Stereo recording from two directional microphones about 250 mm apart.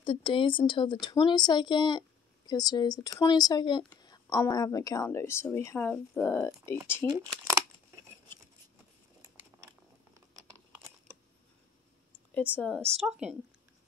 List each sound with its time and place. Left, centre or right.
0.0 s speech: centre
10.3 s crunch: centre
12.5 s speech: centre